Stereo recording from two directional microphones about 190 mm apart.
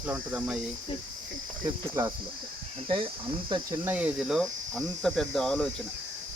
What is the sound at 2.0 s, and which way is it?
Cricket, 15° right (ahead or behind).